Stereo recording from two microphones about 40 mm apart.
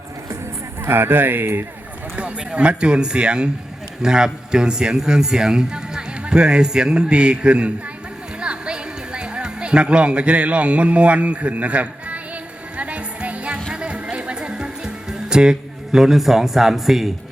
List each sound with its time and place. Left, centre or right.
0.9 s speech: right
2.1 s speech: right
8.4 s music: right
16.0 s speech: centre